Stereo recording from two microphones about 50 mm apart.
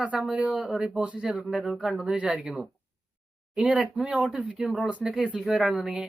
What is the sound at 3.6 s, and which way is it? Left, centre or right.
Speech, right.